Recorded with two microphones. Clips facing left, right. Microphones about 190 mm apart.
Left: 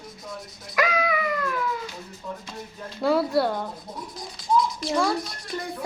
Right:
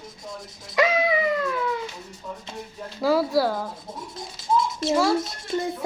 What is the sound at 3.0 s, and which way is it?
Speech, centre (ahead or behind).